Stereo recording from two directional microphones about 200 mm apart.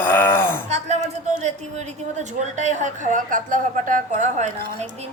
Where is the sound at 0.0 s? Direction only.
10° left (ahead or behind).